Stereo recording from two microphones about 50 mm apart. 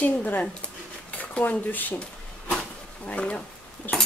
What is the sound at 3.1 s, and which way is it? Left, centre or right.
Speech, left.